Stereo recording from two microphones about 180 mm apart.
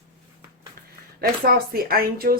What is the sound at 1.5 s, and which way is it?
Speech, 55° right (ahead or behind).